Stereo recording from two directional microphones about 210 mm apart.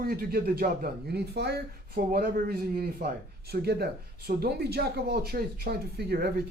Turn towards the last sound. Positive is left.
turn(degrees=-50)  # may be behind; listen again after turning